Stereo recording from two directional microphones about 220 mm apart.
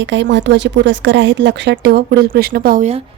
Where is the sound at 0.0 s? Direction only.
55° right (ahead or behind); by 3.0 s 35° right (ahead or behind).